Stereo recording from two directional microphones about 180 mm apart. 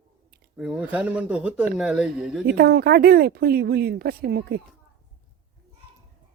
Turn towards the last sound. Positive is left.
turn(degrees=-60)  # may be behind; listen again after turning